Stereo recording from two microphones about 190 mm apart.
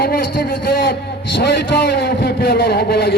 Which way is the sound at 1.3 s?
65° left (ahead or behind).